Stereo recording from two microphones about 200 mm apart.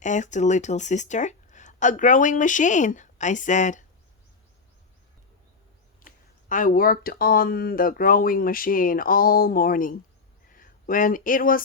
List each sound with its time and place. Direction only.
0.0 s speech: 35° left (ahead or behind)
6.1 s speech: 40° left (ahead or behind)